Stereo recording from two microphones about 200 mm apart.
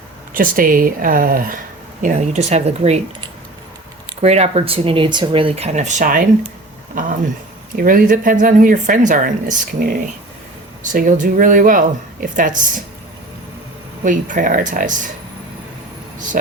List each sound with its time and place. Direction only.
0.3 s speech: 45° right (ahead or behind)
4.2 s speech: 30° right (ahead or behind)
10.9 s speech: 40° right (ahead or behind)
14.0 s speech: 40° right (ahead or behind)
16.3 s speech: 45° right (ahead or behind)